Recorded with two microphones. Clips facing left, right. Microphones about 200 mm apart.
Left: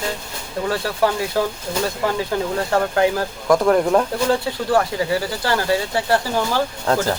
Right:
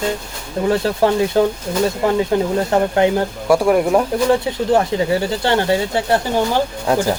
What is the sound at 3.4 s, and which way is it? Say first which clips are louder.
Speech: right 1 dB; 10° right (ahead or behind).